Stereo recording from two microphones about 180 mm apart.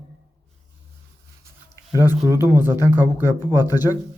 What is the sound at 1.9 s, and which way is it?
Speech, 20° left (ahead or behind).